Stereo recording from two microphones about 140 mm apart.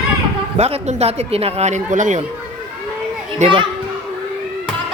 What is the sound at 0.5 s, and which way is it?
A man's voice, 50° right (ahead or behind).